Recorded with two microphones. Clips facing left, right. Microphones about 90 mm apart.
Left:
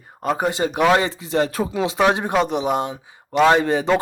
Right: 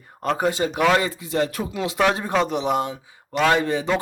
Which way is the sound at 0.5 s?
25° left (ahead or behind).